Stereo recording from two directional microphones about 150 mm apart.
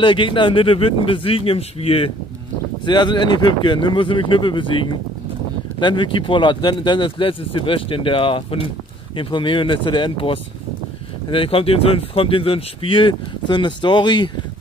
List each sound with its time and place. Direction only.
0.0 s speech: 35° left (ahead or behind)